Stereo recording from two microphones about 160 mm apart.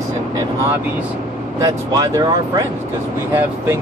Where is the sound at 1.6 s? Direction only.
20° right (ahead or behind).